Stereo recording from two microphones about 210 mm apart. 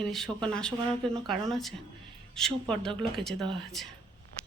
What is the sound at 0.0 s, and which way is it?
Speech, centre (ahead or behind).